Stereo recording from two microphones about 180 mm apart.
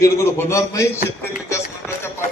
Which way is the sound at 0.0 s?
15° left (ahead or behind).